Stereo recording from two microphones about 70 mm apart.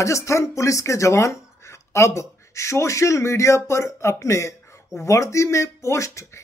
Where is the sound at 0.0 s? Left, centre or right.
Left.